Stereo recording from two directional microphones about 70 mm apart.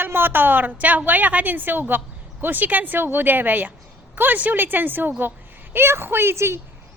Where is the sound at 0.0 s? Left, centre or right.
Right.